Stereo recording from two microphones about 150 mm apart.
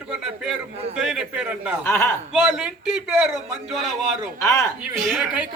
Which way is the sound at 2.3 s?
5° right (ahead or behind).